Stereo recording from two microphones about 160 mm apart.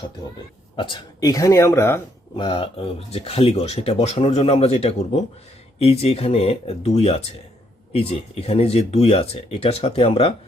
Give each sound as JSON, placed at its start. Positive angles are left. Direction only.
{"t": 0.8, "sound": "speech", "side_deg": 30}
{"t": 2.3, "sound": "speech", "side_deg": 30}